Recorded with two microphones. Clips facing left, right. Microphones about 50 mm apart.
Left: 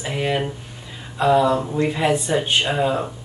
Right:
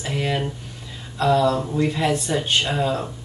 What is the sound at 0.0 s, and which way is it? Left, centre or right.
Speech, centre.